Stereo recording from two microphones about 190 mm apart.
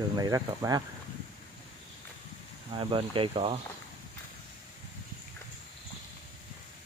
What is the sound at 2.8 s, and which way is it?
Speech, 25° right (ahead or behind).